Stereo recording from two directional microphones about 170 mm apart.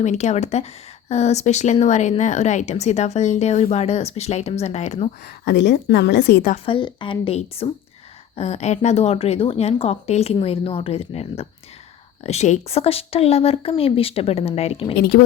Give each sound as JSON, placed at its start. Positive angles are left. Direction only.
{"t": 0.0, "sound": "speech", "side_deg": 45}
{"t": 5.2, "sound": "a woman's voice", "side_deg": 90}
{"t": 6.7, "sound": "speech", "side_deg": 30}
{"t": 15.1, "sound": "a woman's voice", "side_deg": 60}